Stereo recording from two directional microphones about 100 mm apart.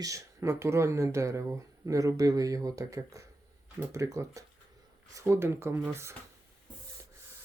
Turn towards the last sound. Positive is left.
turn(degrees=-25)  # may be behind; listen again after turning